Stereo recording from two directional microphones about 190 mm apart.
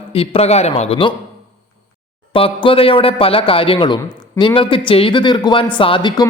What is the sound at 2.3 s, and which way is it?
A man's voice, 30° left (ahead or behind).